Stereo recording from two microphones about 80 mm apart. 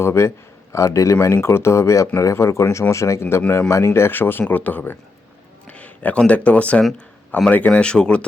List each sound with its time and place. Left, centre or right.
0.0 s a man's voice: left; by 8.2 s centre